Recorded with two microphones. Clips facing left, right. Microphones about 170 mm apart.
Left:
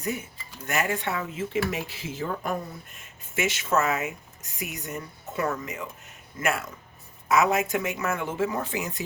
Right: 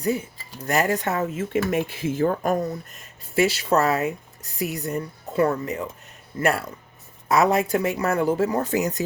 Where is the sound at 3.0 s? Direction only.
35° right (ahead or behind).